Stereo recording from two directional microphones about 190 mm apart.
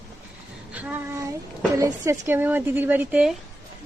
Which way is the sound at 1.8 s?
15° right (ahead or behind).